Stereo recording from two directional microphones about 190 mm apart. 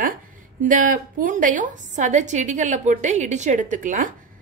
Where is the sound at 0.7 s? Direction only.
45° right (ahead or behind).